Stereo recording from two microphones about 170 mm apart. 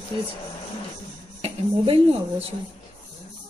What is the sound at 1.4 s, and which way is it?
Speech, 35° right (ahead or behind).